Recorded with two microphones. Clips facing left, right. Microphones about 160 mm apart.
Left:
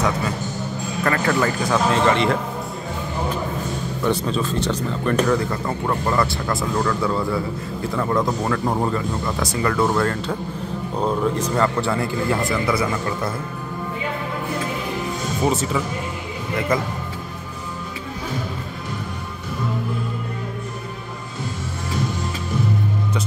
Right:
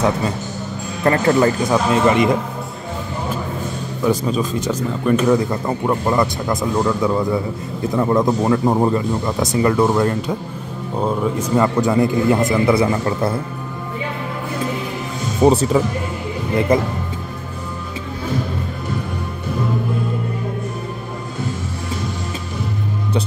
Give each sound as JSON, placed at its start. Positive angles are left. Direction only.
{"t": 1.0, "sound": "speech", "side_deg": -30}
{"t": 1.7, "sound": "speech", "side_deg": -15}
{"t": 4.0, "sound": "speech", "side_deg": -10}
{"t": 11.0, "sound": "speech", "side_deg": -5}
{"t": 15.4, "sound": "speech", "side_deg": -35}